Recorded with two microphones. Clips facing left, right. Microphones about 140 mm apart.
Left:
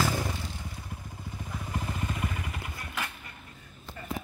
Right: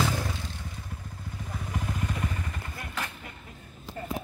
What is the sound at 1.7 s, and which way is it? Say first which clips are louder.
Vehicle: right 1 dB; centre (ahead or behind).